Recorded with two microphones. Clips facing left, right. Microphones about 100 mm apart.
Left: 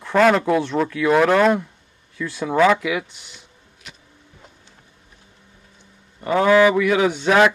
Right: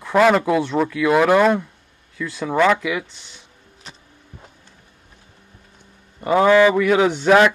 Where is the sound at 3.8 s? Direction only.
30° right (ahead or behind).